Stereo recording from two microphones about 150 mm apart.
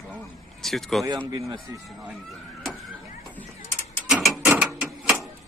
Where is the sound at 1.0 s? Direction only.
30° right (ahead or behind).